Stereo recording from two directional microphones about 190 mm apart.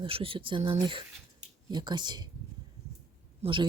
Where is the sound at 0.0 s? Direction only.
30° right (ahead or behind).